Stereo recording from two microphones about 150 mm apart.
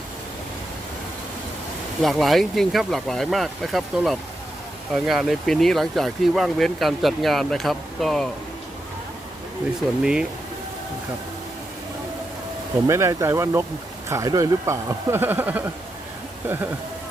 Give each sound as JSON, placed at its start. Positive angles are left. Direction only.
{"t": 2.0, "sound": "speech", "side_deg": 0}
{"t": 10.0, "sound": "speech", "side_deg": -5}
{"t": 12.9, "sound": "speech", "side_deg": -20}